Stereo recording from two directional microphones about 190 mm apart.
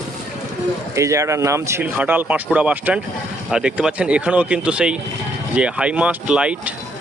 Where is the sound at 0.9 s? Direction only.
15° right (ahead or behind).